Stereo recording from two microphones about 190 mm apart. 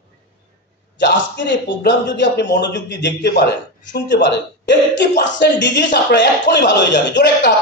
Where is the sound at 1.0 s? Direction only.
70° left (ahead or behind).